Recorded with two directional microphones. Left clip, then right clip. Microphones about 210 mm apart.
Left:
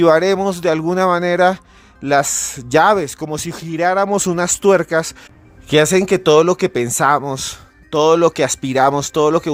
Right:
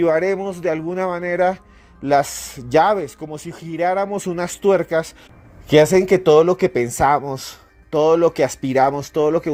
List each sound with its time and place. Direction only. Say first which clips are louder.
0.0 s speech: left 5 dB; 25° left (ahead or behind)